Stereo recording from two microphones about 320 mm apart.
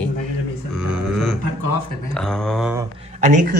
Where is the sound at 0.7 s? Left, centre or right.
Centre.